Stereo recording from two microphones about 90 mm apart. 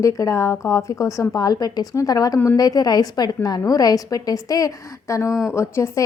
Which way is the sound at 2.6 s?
45° left (ahead or behind).